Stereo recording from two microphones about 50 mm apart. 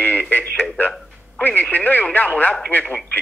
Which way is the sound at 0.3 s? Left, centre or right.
Left.